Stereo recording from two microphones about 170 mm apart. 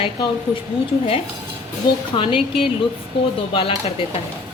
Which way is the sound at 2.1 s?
30° left (ahead or behind).